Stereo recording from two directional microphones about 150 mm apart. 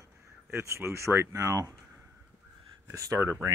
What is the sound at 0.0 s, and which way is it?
Speech, 15° right (ahead or behind).